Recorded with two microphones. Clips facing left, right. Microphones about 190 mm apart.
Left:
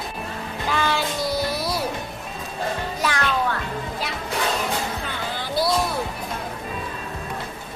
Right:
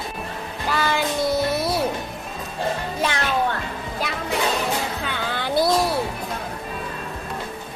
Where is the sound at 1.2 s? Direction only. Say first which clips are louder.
Right 3 dB; 25° right (ahead or behind).